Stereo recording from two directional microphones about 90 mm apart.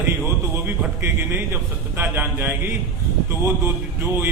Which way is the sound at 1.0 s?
25° right (ahead or behind).